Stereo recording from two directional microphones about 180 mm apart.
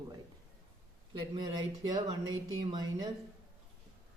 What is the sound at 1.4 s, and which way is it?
Speech, 20° right (ahead or behind).